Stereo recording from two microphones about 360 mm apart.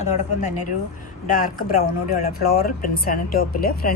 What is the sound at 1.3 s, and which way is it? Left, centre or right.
Speech, left.